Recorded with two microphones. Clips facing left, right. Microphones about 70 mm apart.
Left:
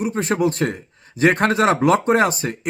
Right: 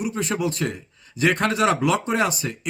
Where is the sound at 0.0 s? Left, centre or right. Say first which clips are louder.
Left 5 dB; left.